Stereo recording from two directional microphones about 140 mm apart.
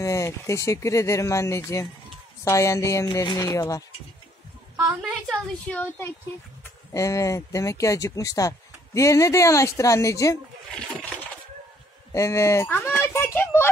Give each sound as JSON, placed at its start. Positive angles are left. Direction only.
{"t": 0.0, "sound": "speech", "side_deg": 20}
{"t": 5.3, "sound": "speech", "side_deg": 10}
{"t": 6.6, "sound": "speech", "side_deg": 20}
{"t": 12.1, "sound": "speech", "side_deg": 20}